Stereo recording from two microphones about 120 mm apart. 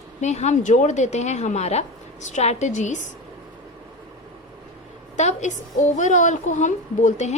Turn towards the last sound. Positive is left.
turn(degrees=80)